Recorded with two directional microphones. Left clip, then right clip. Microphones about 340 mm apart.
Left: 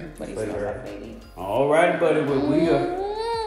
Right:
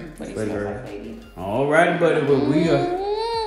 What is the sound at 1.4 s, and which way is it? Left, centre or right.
Speech, right.